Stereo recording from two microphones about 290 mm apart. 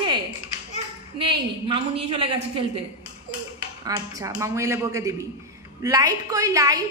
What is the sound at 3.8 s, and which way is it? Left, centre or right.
A woman's voice, centre.